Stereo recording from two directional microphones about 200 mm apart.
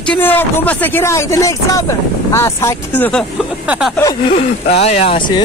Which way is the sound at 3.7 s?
Centre (ahead or behind).